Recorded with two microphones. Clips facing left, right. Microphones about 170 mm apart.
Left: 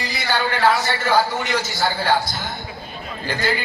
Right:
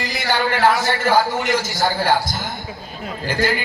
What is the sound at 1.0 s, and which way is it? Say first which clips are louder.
Speech: right 2 dB; 10° right (ahead or behind).